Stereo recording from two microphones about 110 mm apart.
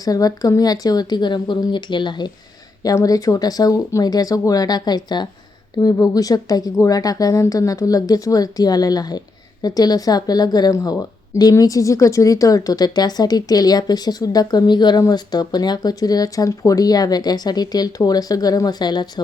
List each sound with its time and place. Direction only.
0.0 s speech: 35° left (ahead or behind)
2.8 s speech: 35° left (ahead or behind)